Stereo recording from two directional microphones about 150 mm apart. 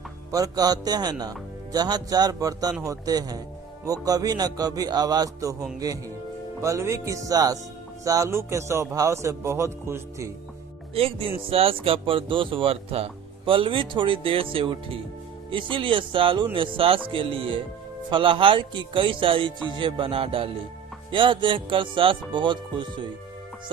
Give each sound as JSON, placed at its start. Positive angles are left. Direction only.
{"t": 0.3, "sound": "speech", "side_deg": -25}
{"t": 10.9, "sound": "speech", "side_deg": -40}